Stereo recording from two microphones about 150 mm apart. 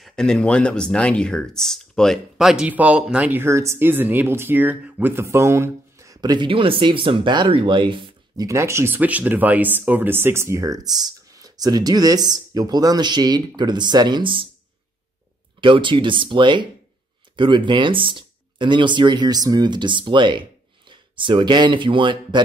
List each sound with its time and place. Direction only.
0.0 s speech: 5° left (ahead or behind); by 8.5 s 30° right (ahead or behind)
8.5 s speech: 20° right (ahead or behind); by 14.5 s 35° right (ahead or behind)
15.6 s speech: 35° right (ahead or behind)